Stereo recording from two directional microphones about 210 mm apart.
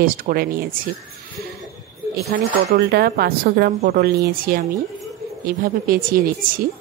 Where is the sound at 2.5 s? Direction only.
45° right (ahead or behind).